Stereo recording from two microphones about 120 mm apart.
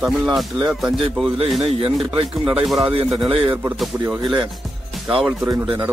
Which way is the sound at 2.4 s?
10° right (ahead or behind).